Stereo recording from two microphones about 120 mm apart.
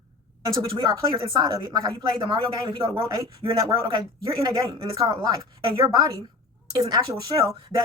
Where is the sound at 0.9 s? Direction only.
30° right (ahead or behind).